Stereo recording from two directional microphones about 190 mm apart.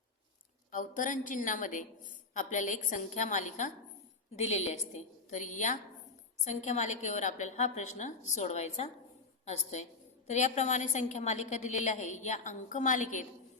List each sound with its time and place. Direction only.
0.7 s a woman's voice: 45° left (ahead or behind)